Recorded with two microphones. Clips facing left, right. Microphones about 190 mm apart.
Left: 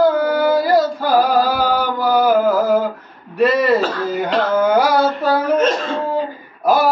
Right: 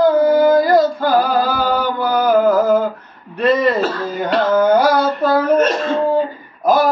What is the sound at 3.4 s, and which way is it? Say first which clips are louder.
Throat clearing: right 1 dB; 5° left (ahead or behind).